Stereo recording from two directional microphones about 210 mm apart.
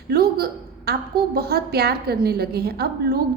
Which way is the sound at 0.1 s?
45° right (ahead or behind).